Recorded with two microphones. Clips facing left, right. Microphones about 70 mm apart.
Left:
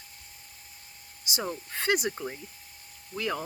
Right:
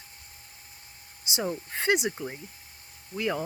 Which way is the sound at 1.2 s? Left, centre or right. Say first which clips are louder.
Right 2 dB; right.